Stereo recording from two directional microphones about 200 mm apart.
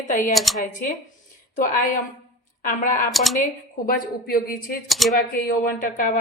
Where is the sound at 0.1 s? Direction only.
40° left (ahead or behind).